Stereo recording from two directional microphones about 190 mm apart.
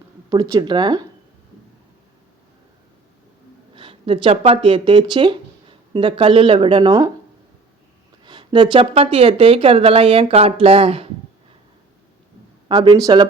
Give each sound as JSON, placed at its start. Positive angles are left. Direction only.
{"t": 0.3, "sound": "speech", "side_deg": -20}
{"t": 3.8, "sound": "speech", "side_deg": -30}
{"t": 8.2, "sound": "speech", "side_deg": -25}
{"t": 12.6, "sound": "speech", "side_deg": -25}